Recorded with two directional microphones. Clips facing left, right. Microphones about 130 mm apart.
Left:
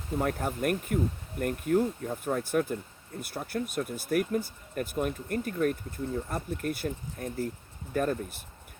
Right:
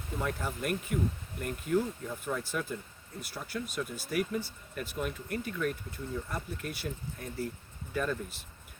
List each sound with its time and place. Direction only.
0.2 s speech: 50° left (ahead or behind)